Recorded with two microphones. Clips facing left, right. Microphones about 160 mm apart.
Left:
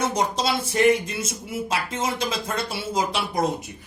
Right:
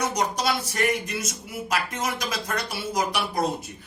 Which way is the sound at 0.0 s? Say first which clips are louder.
Left 2 dB; 25° left (ahead or behind).